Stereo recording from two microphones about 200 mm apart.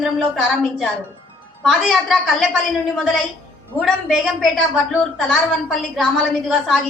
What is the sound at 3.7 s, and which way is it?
Speech, centre (ahead or behind).